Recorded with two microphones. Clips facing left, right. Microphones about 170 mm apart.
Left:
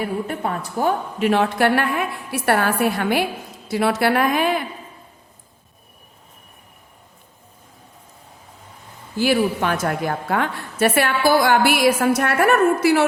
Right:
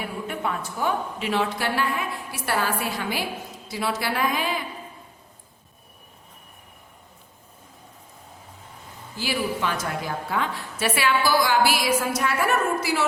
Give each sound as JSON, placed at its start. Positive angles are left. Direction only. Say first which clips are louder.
{"t": 0.0, "sound": "a woman's voice", "louder": "left 5 dB", "side_deg": 40}
{"t": 9.1, "sound": "a woman's voice", "louder": "left 9 dB", "side_deg": 55}